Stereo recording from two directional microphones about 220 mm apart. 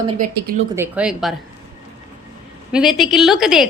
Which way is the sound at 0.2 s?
35° right (ahead or behind).